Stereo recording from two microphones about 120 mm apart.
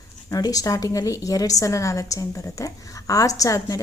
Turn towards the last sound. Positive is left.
turn(degrees=30)  # may be behind; listen again after turning